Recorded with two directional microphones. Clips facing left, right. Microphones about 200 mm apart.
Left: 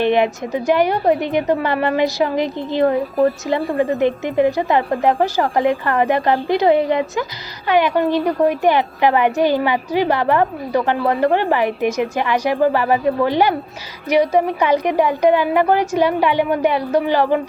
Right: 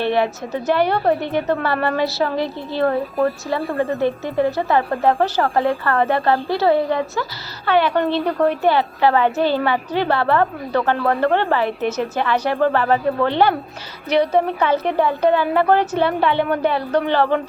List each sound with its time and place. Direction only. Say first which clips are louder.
0.0 s a woman's voice: left 3 dB; 15° left (ahead or behind)